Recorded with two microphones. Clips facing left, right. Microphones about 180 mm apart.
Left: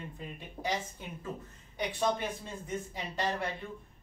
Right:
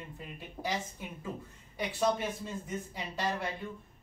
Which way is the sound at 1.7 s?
5° right (ahead or behind).